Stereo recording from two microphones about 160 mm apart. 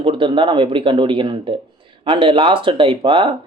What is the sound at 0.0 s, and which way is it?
Speech, 30° right (ahead or behind).